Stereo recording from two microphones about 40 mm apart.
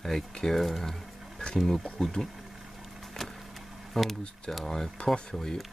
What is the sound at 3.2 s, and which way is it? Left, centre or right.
Vehicle, centre.